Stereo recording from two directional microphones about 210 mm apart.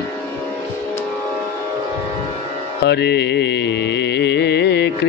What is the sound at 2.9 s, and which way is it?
Music, 55° left (ahead or behind).